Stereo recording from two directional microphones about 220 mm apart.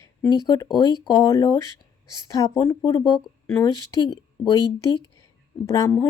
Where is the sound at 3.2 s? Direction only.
5° left (ahead or behind).